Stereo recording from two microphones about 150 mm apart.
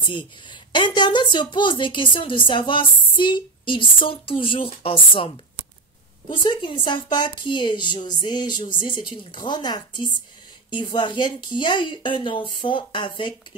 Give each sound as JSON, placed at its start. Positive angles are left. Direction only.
{"t": 0.5, "sound": "a woman's voice", "side_deg": 30}